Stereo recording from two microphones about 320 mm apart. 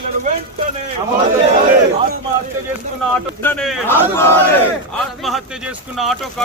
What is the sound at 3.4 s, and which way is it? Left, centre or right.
Speech, centre.